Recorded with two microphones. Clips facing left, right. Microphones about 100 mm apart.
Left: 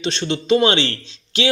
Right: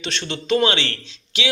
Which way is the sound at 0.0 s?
25° left (ahead or behind).